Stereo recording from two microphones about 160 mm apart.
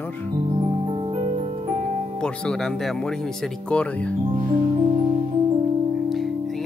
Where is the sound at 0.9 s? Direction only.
35° right (ahead or behind).